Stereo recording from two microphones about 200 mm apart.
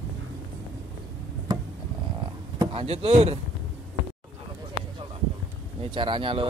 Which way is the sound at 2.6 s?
30° right (ahead or behind).